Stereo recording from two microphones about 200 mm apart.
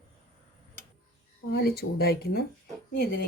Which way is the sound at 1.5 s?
50° left (ahead or behind).